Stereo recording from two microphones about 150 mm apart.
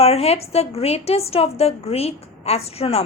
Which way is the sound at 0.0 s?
45° left (ahead or behind).